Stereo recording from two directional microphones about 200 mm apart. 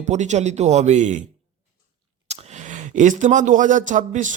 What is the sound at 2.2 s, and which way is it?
Speech, 35° right (ahead or behind).